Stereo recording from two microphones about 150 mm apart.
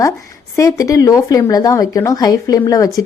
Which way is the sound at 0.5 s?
20° left (ahead or behind).